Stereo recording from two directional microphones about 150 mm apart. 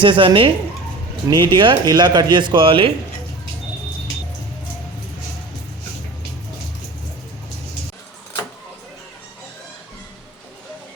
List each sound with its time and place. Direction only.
0.0 s speech: 35° right (ahead or behind)